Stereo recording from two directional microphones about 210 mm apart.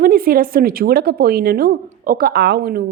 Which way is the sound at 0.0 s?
45° right (ahead or behind).